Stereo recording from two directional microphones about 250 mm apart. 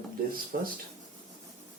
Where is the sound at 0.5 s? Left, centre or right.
Right.